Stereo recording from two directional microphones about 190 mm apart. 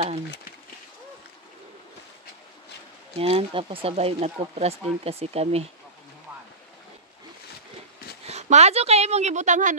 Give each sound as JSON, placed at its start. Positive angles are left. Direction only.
{"t": 3.2, "sound": "speech", "side_deg": -30}
{"t": 8.3, "sound": "speech", "side_deg": -35}